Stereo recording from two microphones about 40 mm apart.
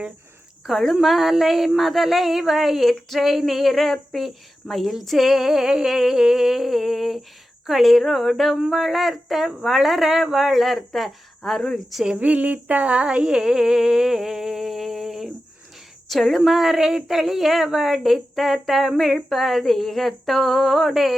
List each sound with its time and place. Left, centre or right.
0.7 s humming: centre
1.0 s speech: centre
5.7 s humming: centre
7.7 s speech: centre
12.1 s a sound: right
13.2 s humming: centre
16.0 s speech: centre
16.4 s humming: centre
17.2 s speech: centre